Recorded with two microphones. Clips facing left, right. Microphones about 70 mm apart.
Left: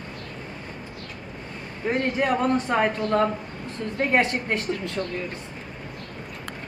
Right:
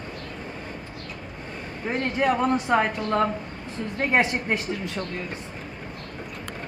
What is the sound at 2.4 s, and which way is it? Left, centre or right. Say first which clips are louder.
Speech: even; centre.